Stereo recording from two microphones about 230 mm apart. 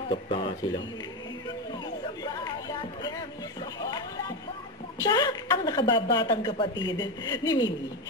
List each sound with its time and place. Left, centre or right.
0.1 s speech: left
2.2 s music: centre
3.8 s a sound: centre
5.0 s a woman's voice: centre